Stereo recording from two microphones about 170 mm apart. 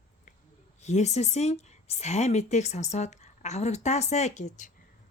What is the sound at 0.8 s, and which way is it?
A woman's voice, 40° left (ahead or behind).